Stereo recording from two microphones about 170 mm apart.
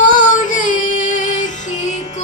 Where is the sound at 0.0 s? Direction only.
50° left (ahead or behind).